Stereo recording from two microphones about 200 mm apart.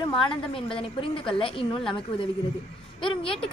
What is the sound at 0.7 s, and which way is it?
A woman's voice, 25° left (ahead or behind).